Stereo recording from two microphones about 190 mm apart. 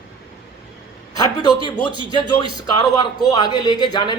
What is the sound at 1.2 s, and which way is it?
A man's voice, 25° left (ahead or behind).